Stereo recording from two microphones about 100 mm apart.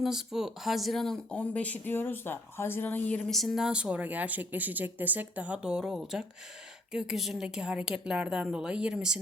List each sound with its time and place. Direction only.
0.0 s speech: 5° right (ahead or behind); by 3.2 s 20° left (ahead or behind)
3.2 s speech: centre (ahead or behind)